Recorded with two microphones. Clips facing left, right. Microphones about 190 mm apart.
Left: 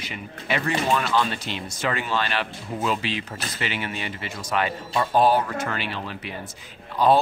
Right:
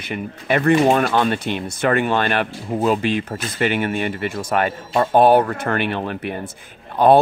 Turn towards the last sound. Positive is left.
turn(degrees=-55)  # may be behind; listen again after turning